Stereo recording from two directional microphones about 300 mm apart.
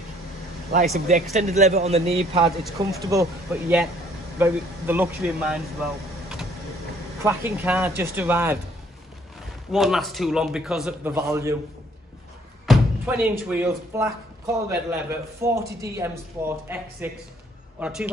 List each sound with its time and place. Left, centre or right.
0.9 s a man's voice: right
3.1 s a man's voice: centre
7.2 s speech: centre
9.7 s a man's voice: centre
12.6 s a man's voice: centre